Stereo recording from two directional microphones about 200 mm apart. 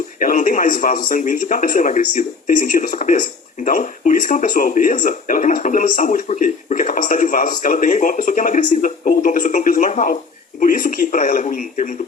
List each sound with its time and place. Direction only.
0.2 s speech: 45° left (ahead or behind)